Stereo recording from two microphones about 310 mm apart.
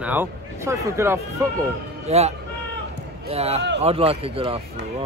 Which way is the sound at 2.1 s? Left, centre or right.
Centre.